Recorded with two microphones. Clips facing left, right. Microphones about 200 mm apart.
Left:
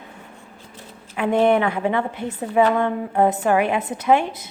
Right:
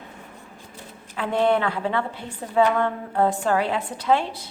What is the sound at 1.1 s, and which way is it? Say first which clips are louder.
A woman's voice: left 4 dB; 15° left (ahead or behind).